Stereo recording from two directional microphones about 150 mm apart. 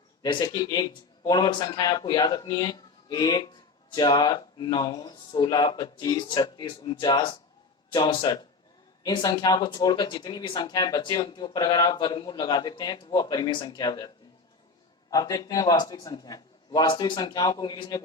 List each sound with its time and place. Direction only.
0.2 s speech: 25° left (ahead or behind)
15.1 s speech: 25° left (ahead or behind)